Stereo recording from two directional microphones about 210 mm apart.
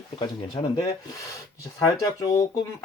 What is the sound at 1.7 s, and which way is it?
Speech, 15° left (ahead or behind).